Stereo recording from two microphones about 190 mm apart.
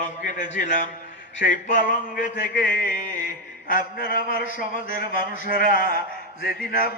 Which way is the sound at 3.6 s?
50° left (ahead or behind).